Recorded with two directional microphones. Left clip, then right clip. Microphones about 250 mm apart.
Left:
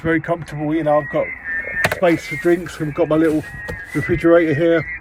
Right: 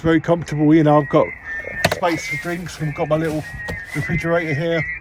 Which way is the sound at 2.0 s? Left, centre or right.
Centre.